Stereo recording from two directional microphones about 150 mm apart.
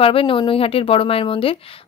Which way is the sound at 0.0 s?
35° left (ahead or behind).